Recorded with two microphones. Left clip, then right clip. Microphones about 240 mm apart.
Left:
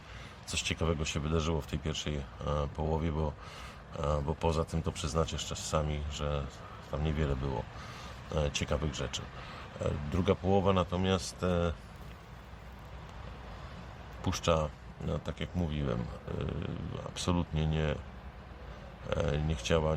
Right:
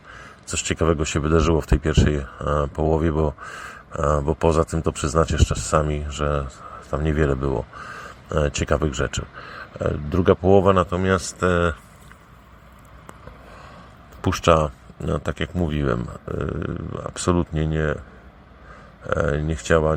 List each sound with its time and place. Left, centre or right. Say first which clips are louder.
0.4 s speech: right 12 dB; right
14.2 s speech: right 13 dB; right
19.0 s speech: right 11 dB; right